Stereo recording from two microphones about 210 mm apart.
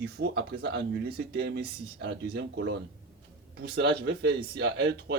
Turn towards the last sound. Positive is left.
turn(degrees=-55)  # may be behind; listen again after turning